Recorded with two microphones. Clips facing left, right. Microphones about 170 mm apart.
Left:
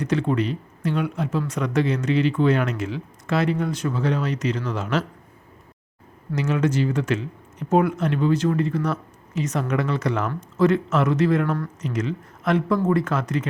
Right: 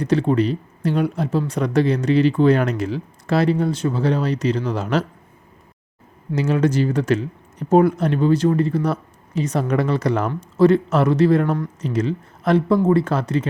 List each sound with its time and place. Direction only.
0.0 s speech: 35° right (ahead or behind)
6.3 s speech: 35° right (ahead or behind)